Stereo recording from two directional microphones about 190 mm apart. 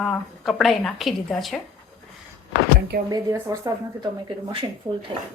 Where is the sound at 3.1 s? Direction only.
15° right (ahead or behind).